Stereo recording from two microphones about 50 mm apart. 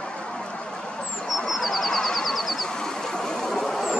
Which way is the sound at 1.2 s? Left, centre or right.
Centre.